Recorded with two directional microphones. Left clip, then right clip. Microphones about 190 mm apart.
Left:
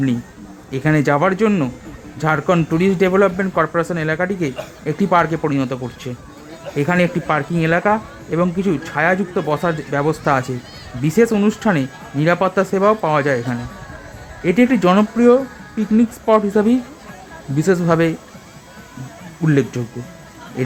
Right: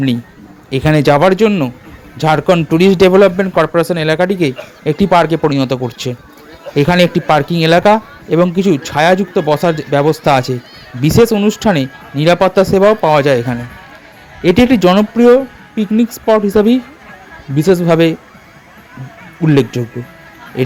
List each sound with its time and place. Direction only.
0.7 s speech: 25° right (ahead or behind)
19.5 s speech: 20° right (ahead or behind)